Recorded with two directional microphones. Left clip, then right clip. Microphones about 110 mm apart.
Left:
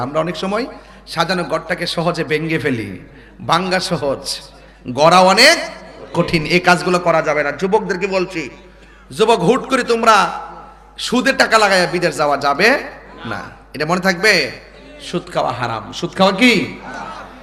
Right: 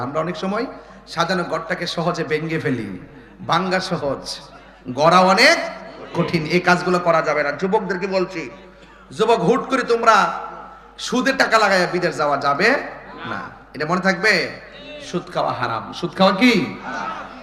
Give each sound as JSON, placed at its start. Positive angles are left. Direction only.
{"t": 0.0, "sound": "a man's voice", "side_deg": 45}
{"t": 9.1, "sound": "a man's voice", "side_deg": 45}